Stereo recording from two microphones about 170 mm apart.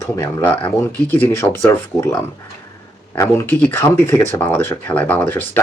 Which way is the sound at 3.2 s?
15° left (ahead or behind).